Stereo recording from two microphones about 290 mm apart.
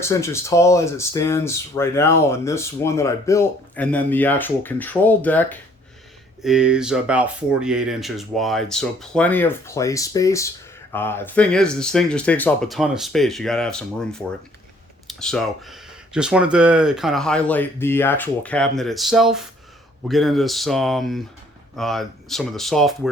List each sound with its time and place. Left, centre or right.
0.0 s speech: centre